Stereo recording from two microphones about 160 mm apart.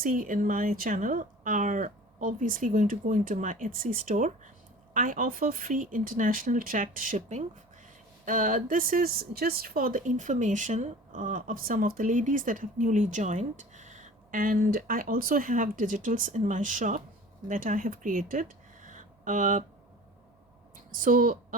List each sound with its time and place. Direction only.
0.0 s speech: 60° right (ahead or behind)
20.9 s speech: 60° right (ahead or behind)